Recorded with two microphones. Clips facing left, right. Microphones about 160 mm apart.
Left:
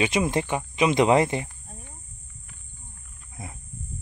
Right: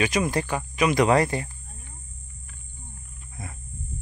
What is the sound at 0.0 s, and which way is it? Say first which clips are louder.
Speech: even; 25° left (ahead or behind).